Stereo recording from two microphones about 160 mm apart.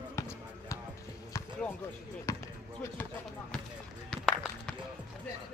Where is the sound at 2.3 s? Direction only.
20° left (ahead or behind).